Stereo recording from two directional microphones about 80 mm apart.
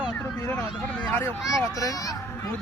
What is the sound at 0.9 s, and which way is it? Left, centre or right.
Speech, centre.